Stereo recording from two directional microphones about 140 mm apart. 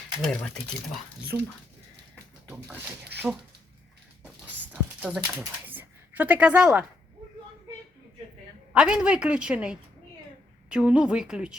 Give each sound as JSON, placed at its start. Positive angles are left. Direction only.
{"t": 0.2, "sound": "speech", "side_deg": 5}
{"t": 1.3, "sound": "speech", "side_deg": 20}
{"t": 4.6, "sound": "a sound", "side_deg": -10}
{"t": 8.7, "sound": "a woman's voice", "side_deg": -5}